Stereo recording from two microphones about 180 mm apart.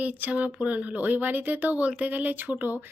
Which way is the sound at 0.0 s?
10° right (ahead or behind).